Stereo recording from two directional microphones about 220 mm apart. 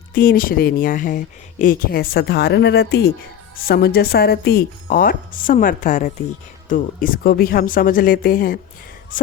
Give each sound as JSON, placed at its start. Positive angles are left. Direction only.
{"t": 0.1, "sound": "speech", "side_deg": 40}